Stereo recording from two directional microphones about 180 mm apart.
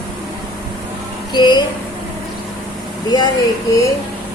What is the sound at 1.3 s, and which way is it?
Speech, 25° left (ahead or behind).